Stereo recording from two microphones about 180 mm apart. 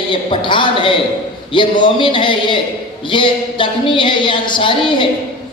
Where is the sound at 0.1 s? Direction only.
25° left (ahead or behind).